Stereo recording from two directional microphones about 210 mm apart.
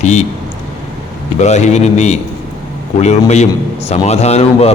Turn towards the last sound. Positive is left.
turn(degrees=30)  # may be behind; listen again after turning